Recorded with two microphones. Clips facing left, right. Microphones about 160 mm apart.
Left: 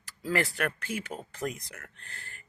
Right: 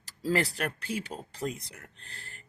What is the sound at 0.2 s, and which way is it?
Speech, 35° right (ahead or behind).